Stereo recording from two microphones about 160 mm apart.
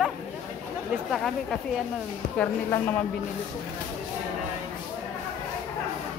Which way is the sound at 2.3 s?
10° left (ahead or behind).